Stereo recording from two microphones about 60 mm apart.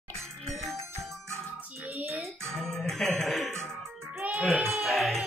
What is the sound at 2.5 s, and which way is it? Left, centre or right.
Music, centre.